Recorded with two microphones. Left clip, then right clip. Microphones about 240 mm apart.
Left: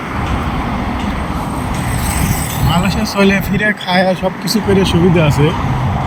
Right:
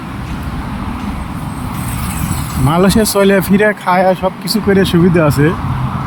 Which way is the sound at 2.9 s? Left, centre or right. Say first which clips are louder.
Right 2 dB; right.